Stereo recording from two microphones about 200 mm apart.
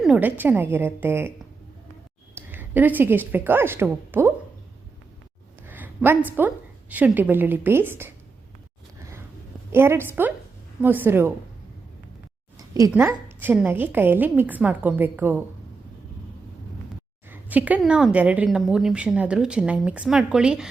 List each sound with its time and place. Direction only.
0.0 s a woman's voice: 5° right (ahead or behind)
2.3 s speech: 10° right (ahead or behind)
5.6 s a sound: 10° right (ahead or behind)
6.9 s a woman's voice: 10° right (ahead or behind)
9.7 s a woman's voice: 10° right (ahead or behind)
12.5 s a woman's voice: 15° right (ahead or behind)
17.2 s a woman's voice: 10° right (ahead or behind)